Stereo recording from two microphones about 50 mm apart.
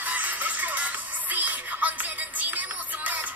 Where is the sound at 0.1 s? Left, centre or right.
Right.